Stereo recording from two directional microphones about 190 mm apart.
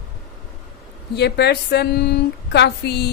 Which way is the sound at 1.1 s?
60° left (ahead or behind).